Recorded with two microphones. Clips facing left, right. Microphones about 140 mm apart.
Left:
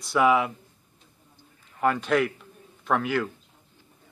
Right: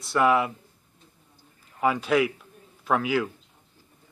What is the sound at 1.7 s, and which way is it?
A man's voice, 5° right (ahead or behind).